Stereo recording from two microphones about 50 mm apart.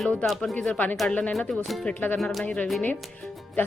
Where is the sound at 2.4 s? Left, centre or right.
Left.